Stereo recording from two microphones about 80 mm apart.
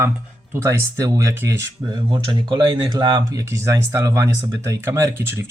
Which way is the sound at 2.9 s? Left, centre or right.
Right.